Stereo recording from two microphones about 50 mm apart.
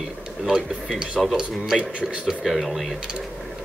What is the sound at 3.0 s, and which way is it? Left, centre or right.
Speech, centre.